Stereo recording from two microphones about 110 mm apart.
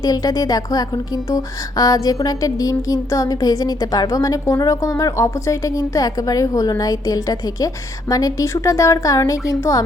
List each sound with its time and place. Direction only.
0.0 s a woman's voice: 35° left (ahead or behind)